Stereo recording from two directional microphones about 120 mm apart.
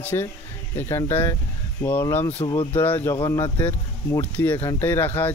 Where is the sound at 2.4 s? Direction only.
40° left (ahead or behind).